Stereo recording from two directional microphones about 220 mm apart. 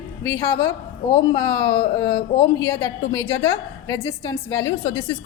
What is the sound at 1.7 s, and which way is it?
A woman's voice, 15° left (ahead or behind).